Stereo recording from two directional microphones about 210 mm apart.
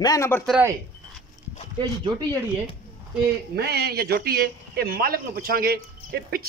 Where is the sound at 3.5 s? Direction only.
50° right (ahead or behind).